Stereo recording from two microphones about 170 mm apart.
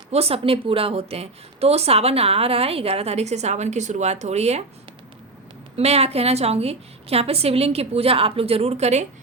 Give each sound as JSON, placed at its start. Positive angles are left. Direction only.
{"t": 0.1, "sound": "a woman's voice", "side_deg": -35}
{"t": 5.7, "sound": "a woman's voice", "side_deg": -35}